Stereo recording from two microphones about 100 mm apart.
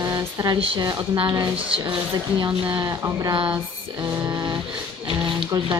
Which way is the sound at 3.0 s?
40° right (ahead or behind).